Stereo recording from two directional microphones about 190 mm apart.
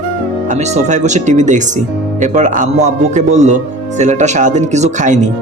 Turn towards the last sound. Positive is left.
turn(degrees=-40)  # may be behind; listen again after turning